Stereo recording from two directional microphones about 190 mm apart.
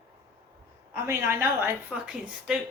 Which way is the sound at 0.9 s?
10° right (ahead or behind).